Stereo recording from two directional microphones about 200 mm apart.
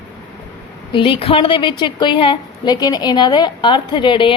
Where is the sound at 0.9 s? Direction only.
25° left (ahead or behind).